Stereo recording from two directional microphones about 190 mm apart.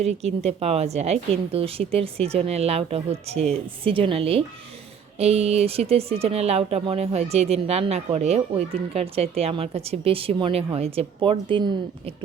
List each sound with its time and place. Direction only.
0.0 s speech: 35° right (ahead or behind)